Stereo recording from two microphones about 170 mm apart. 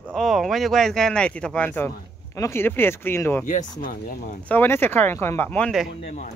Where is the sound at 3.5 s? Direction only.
50° left (ahead or behind).